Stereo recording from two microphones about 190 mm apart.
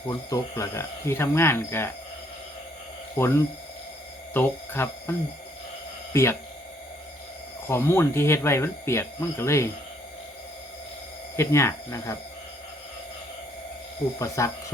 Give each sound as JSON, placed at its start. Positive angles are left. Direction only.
{"t": 0.1, "sound": "speech", "side_deg": 15}
{"t": 3.2, "sound": "speech", "side_deg": 15}
{"t": 6.1, "sound": "speech", "side_deg": 15}
{"t": 7.7, "sound": "speech", "side_deg": 15}
{"t": 11.3, "sound": "speech", "side_deg": 15}
{"t": 14.2, "sound": "speech", "side_deg": 15}